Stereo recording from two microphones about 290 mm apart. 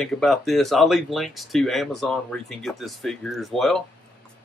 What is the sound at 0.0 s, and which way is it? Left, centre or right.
Speech, centre.